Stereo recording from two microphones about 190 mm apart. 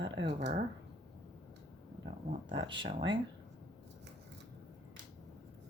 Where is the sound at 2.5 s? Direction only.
25° right (ahead or behind).